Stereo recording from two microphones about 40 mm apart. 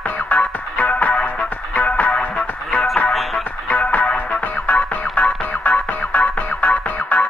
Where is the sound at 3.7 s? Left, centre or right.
Left.